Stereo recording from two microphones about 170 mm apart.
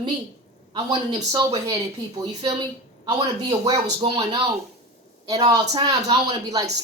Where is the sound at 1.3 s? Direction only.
20° right (ahead or behind).